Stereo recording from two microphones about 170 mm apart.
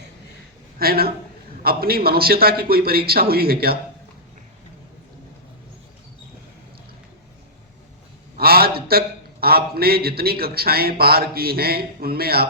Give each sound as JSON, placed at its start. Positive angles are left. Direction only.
{"t": 0.8, "sound": "a man's voice", "side_deg": -65}
{"t": 8.4, "sound": "a man's voice", "side_deg": -65}